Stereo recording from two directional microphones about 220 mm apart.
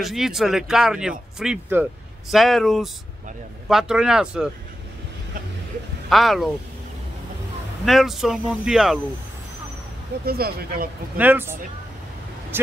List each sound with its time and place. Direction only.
0.0 s speech: centre (ahead or behind)
6.0 s speech: centre (ahead or behind)
7.8 s speech: centre (ahead or behind)
10.2 s speech: 45° right (ahead or behind)
11.1 s speech: 10° right (ahead or behind)